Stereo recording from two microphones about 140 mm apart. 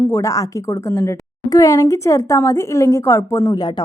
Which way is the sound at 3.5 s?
30° left (ahead or behind).